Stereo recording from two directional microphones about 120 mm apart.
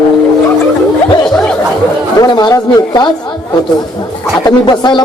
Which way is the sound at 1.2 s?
5° left (ahead or behind).